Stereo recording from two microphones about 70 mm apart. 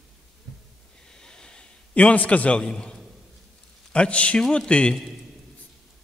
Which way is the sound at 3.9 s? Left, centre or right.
Centre.